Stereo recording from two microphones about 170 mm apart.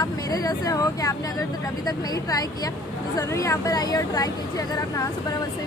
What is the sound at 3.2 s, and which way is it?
Speech, 20° left (ahead or behind).